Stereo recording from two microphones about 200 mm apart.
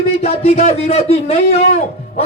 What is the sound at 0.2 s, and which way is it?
Speech, 30° left (ahead or behind).